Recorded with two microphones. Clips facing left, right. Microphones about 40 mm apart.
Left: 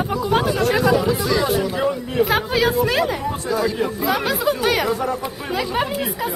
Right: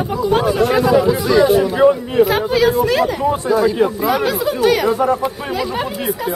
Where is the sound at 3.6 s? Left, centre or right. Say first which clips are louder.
Right 6 dB; right.